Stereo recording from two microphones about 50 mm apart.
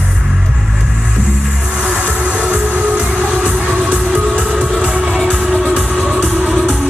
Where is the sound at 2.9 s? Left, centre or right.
Centre.